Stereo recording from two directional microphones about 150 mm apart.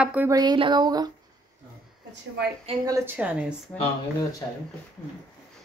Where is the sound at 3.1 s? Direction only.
5° right (ahead or behind).